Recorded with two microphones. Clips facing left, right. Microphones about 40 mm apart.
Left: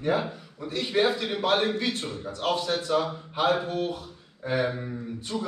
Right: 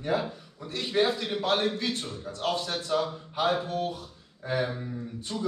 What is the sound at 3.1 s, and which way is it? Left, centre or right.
Speech, left.